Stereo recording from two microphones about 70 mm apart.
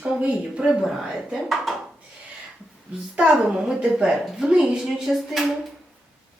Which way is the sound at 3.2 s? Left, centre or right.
Centre.